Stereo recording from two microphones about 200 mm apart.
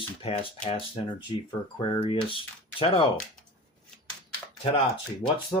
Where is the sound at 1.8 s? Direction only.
25° left (ahead or behind).